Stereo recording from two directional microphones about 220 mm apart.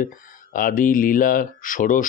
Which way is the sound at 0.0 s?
40° left (ahead or behind).